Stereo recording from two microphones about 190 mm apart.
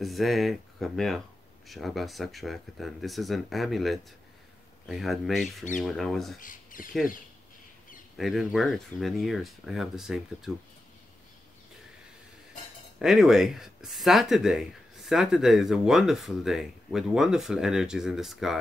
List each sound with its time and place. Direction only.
0.0 s speech: centre (ahead or behind)
6.4 s speech: 45° left (ahead or behind)
8.2 s speech: centre (ahead or behind)
13.0 s speech: centre (ahead or behind)